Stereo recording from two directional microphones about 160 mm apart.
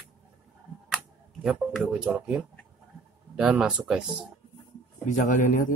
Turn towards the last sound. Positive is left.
turn(degrees=55)  # may be behind; listen again after turning